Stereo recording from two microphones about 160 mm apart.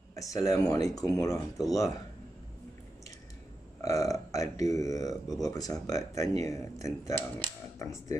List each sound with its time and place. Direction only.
0.1 s speech: 20° left (ahead or behind)
3.8 s speech: 20° left (ahead or behind)